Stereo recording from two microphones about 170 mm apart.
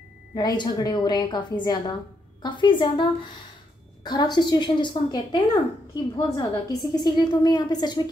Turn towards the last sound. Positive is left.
turn(degrees=25)  # may be behind; listen again after turning